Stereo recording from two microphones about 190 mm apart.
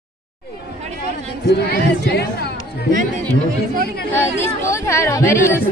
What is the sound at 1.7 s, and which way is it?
Speech, 60° left (ahead or behind).